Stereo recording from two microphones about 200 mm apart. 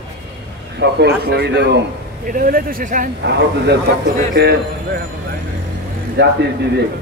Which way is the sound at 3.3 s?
55° right (ahead or behind).